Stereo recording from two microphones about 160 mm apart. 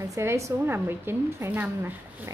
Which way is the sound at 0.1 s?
15° right (ahead or behind).